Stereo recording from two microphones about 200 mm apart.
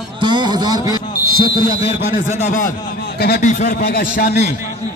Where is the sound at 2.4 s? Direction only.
35° left (ahead or behind).